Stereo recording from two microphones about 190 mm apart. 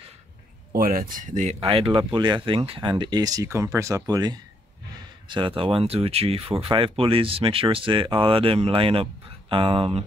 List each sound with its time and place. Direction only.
0.7 s speech: 50° right (ahead or behind); by 10.0 s 30° right (ahead or behind)